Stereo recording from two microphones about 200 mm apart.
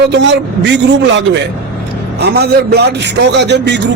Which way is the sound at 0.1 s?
60° right (ahead or behind).